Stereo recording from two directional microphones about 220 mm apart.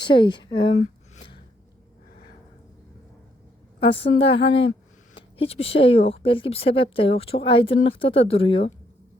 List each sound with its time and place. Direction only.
0.0 s speech: 20° left (ahead or behind)
1.1 s a sound: 25° left (ahead or behind)
3.8 s a woman's voice: 25° left (ahead or behind)